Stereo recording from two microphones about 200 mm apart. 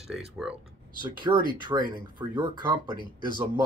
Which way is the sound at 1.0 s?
20° right (ahead or behind).